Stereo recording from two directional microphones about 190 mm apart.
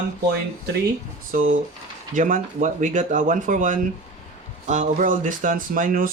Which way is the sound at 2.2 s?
45° right (ahead or behind).